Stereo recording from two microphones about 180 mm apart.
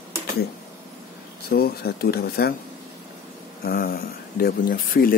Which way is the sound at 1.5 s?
60° left (ahead or behind).